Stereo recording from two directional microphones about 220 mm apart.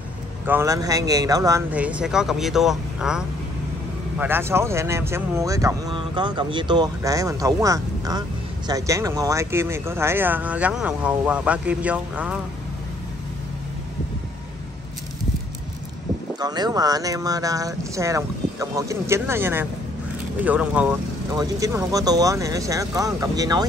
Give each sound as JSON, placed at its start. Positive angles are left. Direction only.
{"t": 0.5, "sound": "speech", "side_deg": -15}
{"t": 16.3, "sound": "speech", "side_deg": -20}